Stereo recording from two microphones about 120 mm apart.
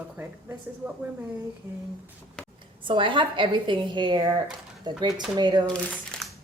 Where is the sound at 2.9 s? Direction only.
45° right (ahead or behind).